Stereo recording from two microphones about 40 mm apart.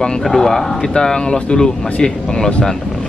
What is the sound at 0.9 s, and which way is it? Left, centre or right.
Speech, centre.